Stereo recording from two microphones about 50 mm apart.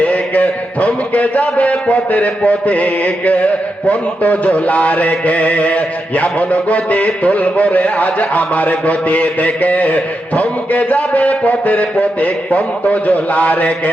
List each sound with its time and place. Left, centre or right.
0.0 s a man's voice: left